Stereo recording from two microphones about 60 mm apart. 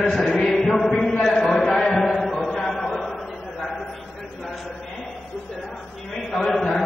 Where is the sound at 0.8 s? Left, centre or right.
Centre.